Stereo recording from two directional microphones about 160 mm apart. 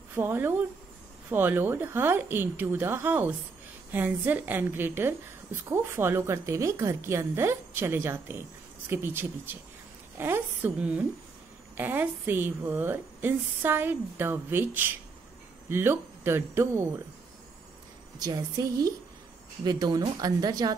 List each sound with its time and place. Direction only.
0.1 s a woman's voice: 15° right (ahead or behind)
18.2 s a woman's voice: 25° right (ahead or behind)